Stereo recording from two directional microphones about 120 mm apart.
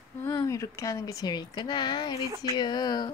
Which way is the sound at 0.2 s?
20° left (ahead or behind).